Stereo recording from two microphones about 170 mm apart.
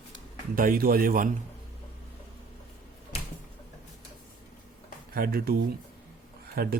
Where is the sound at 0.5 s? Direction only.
55° right (ahead or behind).